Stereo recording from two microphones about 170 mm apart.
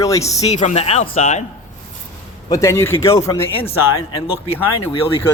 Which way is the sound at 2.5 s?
20° left (ahead or behind).